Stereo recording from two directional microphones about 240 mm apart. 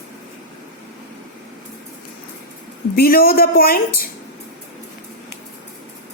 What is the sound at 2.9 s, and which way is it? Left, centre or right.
A woman's voice, left.